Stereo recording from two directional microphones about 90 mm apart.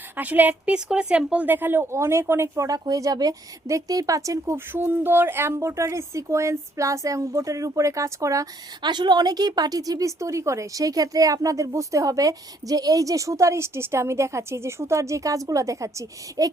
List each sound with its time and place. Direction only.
0.2 s speech: 20° right (ahead or behind)
2.6 s speech: 45° right (ahead or behind)
4.7 s speech: 25° right (ahead or behind)
8.8 s speech: 55° right (ahead or behind); by 16.5 s 35° right (ahead or behind)